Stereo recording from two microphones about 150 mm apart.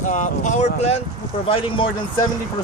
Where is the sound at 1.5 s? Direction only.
35° left (ahead or behind).